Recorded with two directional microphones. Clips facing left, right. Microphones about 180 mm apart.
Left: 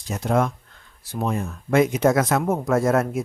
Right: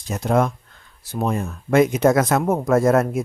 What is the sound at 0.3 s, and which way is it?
Speech, 45° right (ahead or behind).